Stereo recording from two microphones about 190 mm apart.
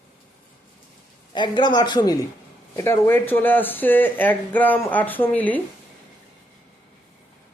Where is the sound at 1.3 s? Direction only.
25° left (ahead or behind).